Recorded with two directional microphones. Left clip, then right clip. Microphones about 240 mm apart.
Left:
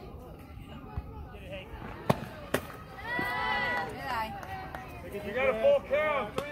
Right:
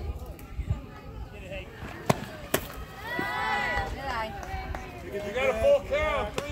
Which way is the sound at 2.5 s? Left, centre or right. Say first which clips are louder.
Right 3 dB; right.